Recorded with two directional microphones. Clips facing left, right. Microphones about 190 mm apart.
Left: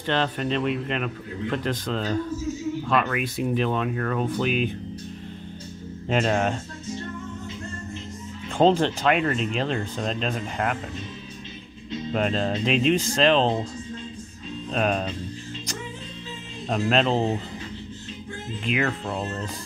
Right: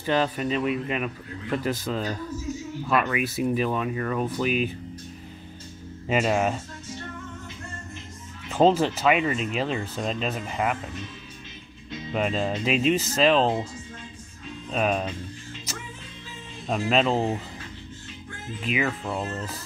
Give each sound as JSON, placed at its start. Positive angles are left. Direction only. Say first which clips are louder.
{"t": 0.0, "sound": "speech", "louder": "right 1 dB", "side_deg": -5}
{"t": 6.0, "sound": "speech", "louder": "even", "side_deg": -5}
{"t": 8.5, "sound": "speech", "louder": "even", "side_deg": -5}
{"t": 12.1, "sound": "speech", "louder": "left 1 dB", "side_deg": -5}
{"t": 14.7, "sound": "speech", "louder": "even", "side_deg": -5}
{"t": 16.6, "sound": "speech", "louder": "left 1 dB", "side_deg": -5}
{"t": 18.6, "sound": "speech", "louder": "left 1 dB", "side_deg": -5}